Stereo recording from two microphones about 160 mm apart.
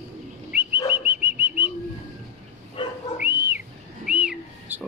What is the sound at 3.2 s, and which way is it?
Whistle, 15° right (ahead or behind).